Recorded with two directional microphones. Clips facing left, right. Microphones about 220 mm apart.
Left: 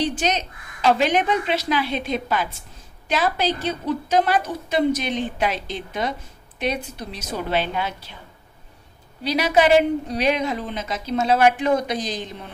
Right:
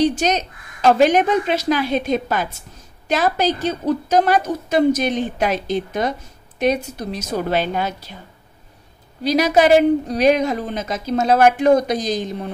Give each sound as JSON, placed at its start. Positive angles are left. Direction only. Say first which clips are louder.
{"t": 0.0, "sound": "a woman's voice", "louder": "right 5 dB", "side_deg": -40}
{"t": 9.2, "sound": "a woman's voice", "louder": "right 4 dB", "side_deg": -40}